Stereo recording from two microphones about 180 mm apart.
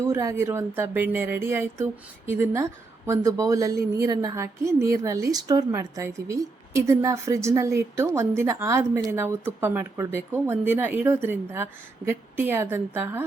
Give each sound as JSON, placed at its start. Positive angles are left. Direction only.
{"t": 0.0, "sound": "speech", "side_deg": -15}